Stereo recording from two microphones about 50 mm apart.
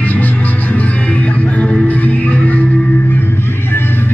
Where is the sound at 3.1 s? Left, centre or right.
Left.